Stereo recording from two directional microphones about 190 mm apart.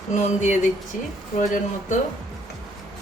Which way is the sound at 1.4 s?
45° left (ahead or behind).